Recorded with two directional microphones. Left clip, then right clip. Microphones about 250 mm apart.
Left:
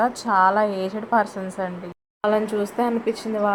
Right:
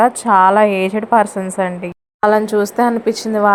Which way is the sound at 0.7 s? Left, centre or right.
Right.